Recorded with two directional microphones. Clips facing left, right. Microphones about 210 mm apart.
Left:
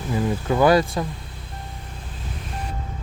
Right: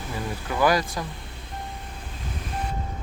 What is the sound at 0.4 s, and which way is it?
Speech, 25° left (ahead or behind).